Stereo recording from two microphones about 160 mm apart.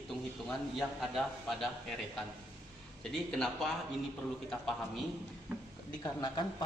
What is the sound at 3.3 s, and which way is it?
A man's voice, 5° left (ahead or behind).